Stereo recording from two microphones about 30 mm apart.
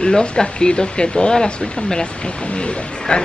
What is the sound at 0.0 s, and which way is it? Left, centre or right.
A woman's voice, left.